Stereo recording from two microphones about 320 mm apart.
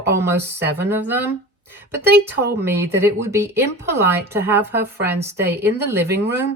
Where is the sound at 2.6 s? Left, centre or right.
Centre.